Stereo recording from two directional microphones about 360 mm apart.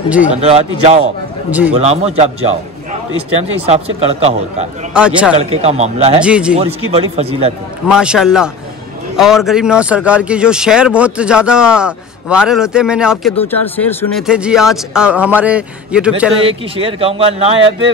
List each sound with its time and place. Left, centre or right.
0.1 s speech: centre
0.4 s speech: centre
1.5 s speech: centre
1.8 s a man's voice: centre
4.9 s speech: centre
5.4 s speech: centre
6.2 s speech: centre
6.9 s speech: centre
7.8 s speech: centre
16.4 s speech: centre